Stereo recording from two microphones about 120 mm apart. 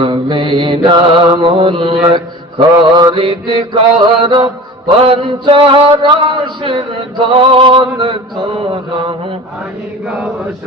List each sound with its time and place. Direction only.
0.0 s mantra: 40° right (ahead or behind)
3.2 s a sound: 45° right (ahead or behind)
10.1 s mantra: 10° right (ahead or behind)